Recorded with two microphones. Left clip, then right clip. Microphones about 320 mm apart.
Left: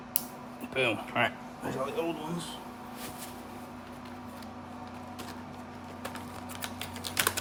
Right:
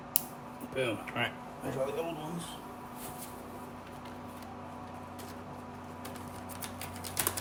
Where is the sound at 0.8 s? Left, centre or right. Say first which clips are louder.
Left 5 dB; left.